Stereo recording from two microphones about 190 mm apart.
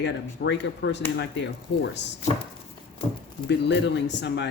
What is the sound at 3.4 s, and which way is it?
Speech, 65° left (ahead or behind).